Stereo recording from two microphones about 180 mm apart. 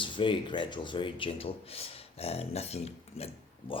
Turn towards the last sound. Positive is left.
turn(degrees=30)  # may be behind; listen again after turning